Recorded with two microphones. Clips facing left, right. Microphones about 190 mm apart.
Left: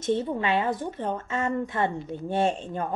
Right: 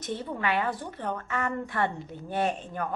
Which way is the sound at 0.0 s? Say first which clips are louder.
Left 6 dB; 25° left (ahead or behind).